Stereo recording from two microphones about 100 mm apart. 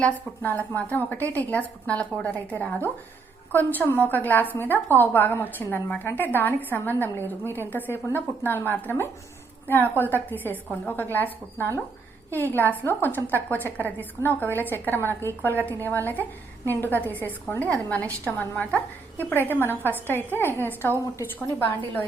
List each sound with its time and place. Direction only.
0.0 s a woman's voice: 15° left (ahead or behind)